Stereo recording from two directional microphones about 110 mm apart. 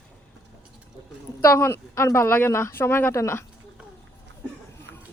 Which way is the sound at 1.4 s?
25° left (ahead or behind).